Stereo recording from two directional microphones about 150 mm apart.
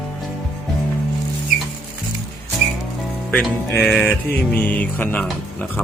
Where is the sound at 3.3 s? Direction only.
5° left (ahead or behind).